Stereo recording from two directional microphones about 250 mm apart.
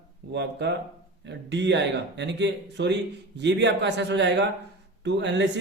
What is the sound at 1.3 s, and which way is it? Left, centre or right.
A man's voice, right.